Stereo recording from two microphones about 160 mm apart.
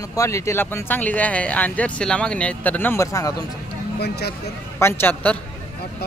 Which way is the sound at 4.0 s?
90° left.